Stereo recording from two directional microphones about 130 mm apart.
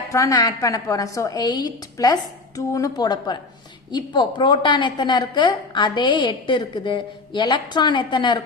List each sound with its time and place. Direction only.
0.1 s a woman's voice: 25° left (ahead or behind)